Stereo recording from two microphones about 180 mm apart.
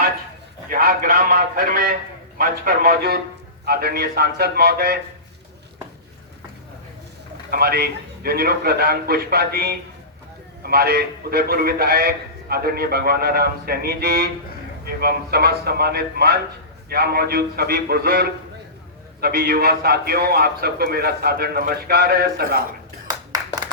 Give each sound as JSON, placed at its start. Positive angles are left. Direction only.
{"t": 0.7, "sound": "a man's voice", "side_deg": -50}
{"t": 7.5, "sound": "a man's voice", "side_deg": -60}